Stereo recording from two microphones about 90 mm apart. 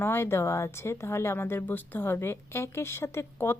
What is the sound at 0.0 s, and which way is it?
A woman's voice, 25° left (ahead or behind).